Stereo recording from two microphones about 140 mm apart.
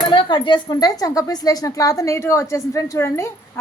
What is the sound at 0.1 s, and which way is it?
Speech, 35° left (ahead or behind).